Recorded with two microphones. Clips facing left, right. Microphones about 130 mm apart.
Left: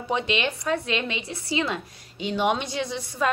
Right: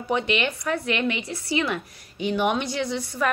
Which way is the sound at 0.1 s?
25° left (ahead or behind).